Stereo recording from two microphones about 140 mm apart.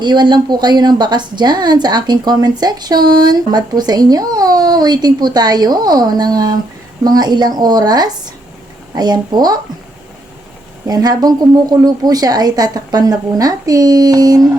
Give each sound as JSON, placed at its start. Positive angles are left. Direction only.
{"t": 0.0, "sound": "a woman's voice", "side_deg": -30}
{"t": 10.8, "sound": "a woman's voice", "side_deg": -30}